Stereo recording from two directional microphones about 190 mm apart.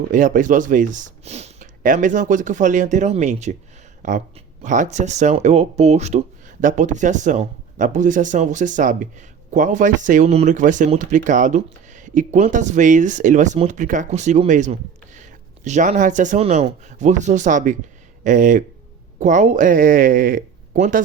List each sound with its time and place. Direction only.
0.1 s speech: 45° right (ahead or behind)